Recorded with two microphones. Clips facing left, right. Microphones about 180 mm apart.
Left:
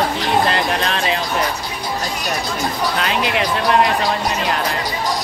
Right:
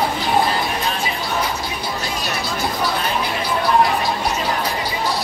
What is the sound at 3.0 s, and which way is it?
Music, 90° left.